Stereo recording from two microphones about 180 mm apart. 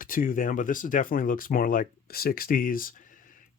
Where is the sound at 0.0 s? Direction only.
50° left (ahead or behind).